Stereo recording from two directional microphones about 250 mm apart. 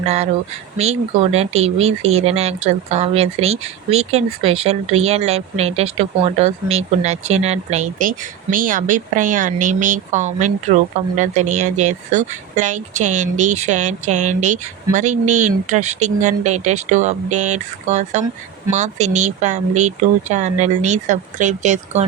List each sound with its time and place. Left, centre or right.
0.0 s speech: right